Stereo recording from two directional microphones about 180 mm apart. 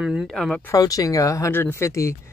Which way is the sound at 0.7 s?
20° left (ahead or behind).